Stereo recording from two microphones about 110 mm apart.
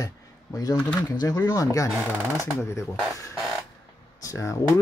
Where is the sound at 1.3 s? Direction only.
30° left (ahead or behind).